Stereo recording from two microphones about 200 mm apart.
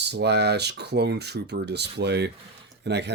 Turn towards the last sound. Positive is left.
turn(degrees=-60)  # may be behind; listen again after turning